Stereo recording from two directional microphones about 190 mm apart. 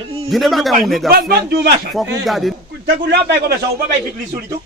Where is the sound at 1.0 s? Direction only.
55° right (ahead or behind).